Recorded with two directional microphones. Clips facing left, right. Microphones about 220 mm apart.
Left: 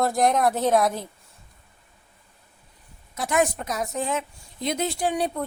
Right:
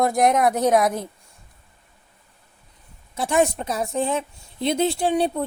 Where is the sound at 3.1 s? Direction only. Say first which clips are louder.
Right 3 dB; 30° right (ahead or behind).